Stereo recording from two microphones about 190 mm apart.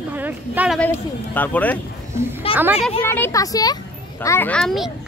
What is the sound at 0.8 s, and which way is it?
Speech, 10° left (ahead or behind).